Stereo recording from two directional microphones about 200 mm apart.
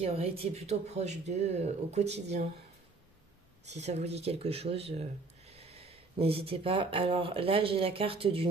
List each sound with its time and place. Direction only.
0.0 s speech: 30° right (ahead or behind)
3.6 s speech: 35° right (ahead or behind)